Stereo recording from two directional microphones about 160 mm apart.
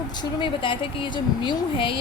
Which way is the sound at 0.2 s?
30° left (ahead or behind).